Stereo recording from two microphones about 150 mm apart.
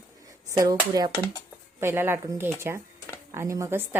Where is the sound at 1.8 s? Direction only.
15° right (ahead or behind).